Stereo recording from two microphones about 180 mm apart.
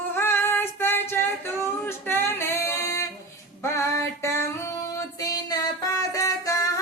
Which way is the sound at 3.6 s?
15° left (ahead or behind).